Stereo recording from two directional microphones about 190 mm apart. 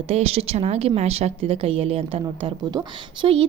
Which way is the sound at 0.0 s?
30° right (ahead or behind).